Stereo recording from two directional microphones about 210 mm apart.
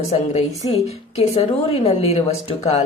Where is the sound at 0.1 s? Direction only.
30° left (ahead or behind).